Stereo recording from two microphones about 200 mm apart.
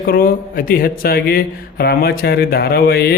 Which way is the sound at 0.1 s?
45° left (ahead or behind).